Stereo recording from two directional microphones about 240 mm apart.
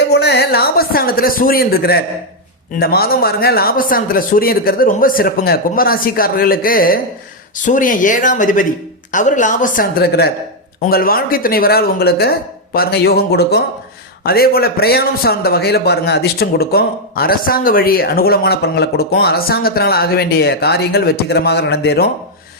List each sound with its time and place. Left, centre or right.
0.1 s a man's voice: left